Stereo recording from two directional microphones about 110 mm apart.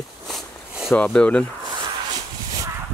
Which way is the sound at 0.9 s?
15° left (ahead or behind).